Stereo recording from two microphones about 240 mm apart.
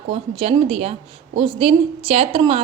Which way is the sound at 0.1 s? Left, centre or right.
Right.